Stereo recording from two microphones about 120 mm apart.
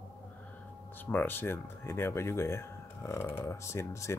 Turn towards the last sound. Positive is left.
turn(degrees=25)  # may be behind; listen again after turning